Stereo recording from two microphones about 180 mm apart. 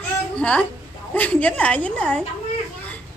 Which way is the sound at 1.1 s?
10° left (ahead or behind).